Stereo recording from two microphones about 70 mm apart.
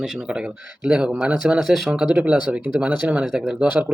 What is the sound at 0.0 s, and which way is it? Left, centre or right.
Speech, centre.